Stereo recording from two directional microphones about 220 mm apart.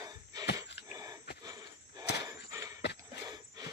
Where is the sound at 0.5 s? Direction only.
15° right (ahead or behind).